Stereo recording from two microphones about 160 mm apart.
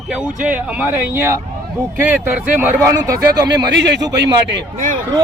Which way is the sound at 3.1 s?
90° right.